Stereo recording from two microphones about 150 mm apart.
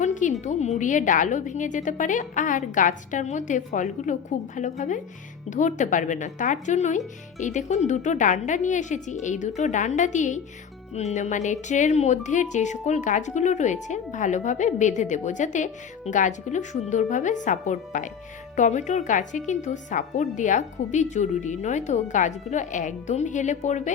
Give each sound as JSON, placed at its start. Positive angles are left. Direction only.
{"t": 0.0, "sound": "music", "side_deg": 55}
{"t": 0.4, "sound": "a woman's voice", "side_deg": 50}